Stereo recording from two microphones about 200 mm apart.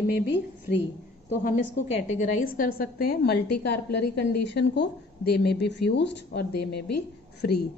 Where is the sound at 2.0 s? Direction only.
40° left (ahead or behind).